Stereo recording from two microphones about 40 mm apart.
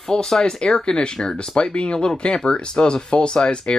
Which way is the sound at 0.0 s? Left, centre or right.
Centre.